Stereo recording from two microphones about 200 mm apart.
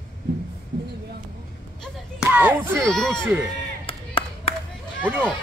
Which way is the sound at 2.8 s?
5° left (ahead or behind).